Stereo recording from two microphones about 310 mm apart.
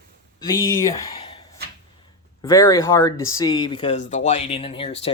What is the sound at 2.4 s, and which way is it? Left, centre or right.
Speech, centre.